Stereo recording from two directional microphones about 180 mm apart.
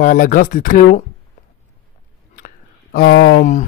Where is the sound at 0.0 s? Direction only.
50° left (ahead or behind).